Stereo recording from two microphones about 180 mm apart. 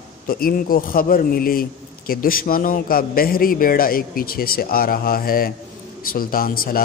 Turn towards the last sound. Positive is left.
turn(degrees=55)  # may be behind; listen again after turning